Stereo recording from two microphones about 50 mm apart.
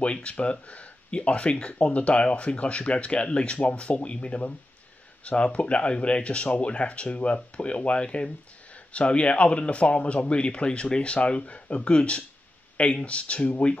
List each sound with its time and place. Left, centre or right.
0.0 s speech: left